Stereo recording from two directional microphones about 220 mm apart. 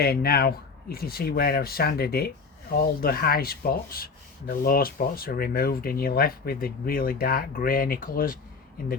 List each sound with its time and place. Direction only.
0.0 s speech: 45° left (ahead or behind)